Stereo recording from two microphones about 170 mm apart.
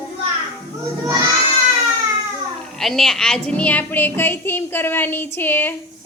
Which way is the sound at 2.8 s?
Centre (ahead or behind).